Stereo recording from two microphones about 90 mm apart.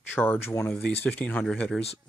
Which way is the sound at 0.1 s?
20° left (ahead or behind).